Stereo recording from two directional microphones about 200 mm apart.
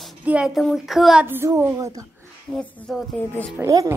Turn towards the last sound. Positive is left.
turn(degrees=-15)  # may be behind; listen again after turning